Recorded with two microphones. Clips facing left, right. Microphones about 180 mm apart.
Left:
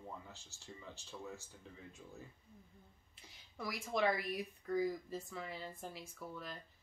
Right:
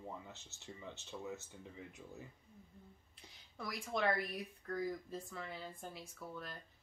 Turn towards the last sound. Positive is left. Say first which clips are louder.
# left 1 dB
turn(degrees=0)  # may be behind; listen again after turning